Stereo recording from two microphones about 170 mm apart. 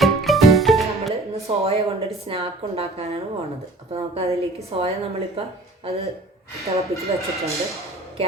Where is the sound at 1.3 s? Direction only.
35° right (ahead or behind).